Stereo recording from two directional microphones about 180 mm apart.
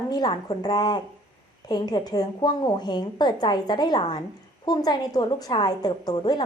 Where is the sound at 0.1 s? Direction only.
20° left (ahead or behind).